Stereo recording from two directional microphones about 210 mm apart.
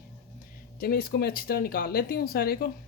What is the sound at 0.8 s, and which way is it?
Speech, 45° left (ahead or behind).